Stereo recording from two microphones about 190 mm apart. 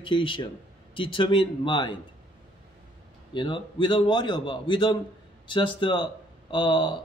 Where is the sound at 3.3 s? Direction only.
25° left (ahead or behind).